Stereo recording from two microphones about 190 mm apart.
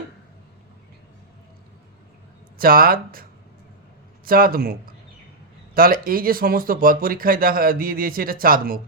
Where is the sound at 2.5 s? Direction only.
50° right (ahead or behind).